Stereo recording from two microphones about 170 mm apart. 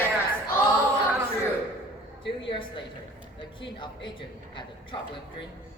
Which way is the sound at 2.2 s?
30° left (ahead or behind).